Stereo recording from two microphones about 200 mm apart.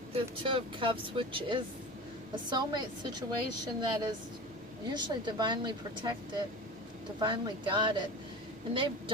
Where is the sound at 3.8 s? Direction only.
20° right (ahead or behind).